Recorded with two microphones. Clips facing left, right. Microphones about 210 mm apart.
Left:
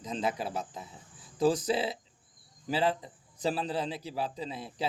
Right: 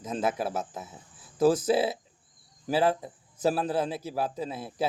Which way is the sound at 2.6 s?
45° right (ahead or behind).